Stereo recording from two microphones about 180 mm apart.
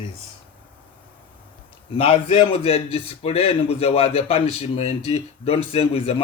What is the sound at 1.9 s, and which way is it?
A man's voice, 30° left (ahead or behind).